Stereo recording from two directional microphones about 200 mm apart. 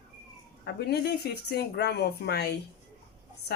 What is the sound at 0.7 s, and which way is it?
A woman's voice, 55° left (ahead or behind).